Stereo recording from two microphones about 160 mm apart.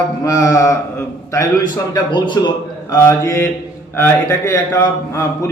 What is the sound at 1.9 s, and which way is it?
Speech, 30° left (ahead or behind).